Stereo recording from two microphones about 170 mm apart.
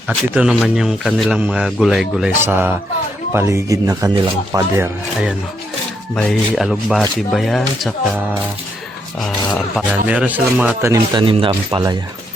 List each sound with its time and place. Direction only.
0.1 s speech: centre (ahead or behind)
2.5 s speech: 10° right (ahead or behind)
9.7 s speech: 5° right (ahead or behind)
11.1 s speech: 30° right (ahead or behind)